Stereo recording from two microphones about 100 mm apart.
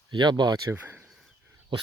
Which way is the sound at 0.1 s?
50° right (ahead or behind).